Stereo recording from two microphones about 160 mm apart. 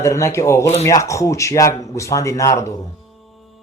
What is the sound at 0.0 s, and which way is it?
Speech, 20° left (ahead or behind).